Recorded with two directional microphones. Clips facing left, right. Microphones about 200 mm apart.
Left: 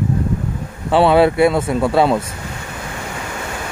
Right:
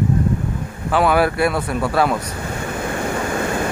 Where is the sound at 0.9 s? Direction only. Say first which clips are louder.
Left 4 dB; 25° left (ahead or behind).